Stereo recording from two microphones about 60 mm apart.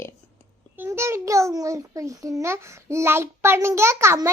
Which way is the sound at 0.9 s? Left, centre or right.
Right.